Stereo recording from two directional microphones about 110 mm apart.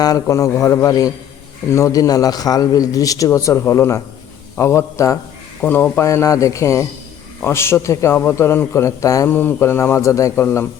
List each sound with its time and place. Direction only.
0.0 s a man's voice: 30° left (ahead or behind)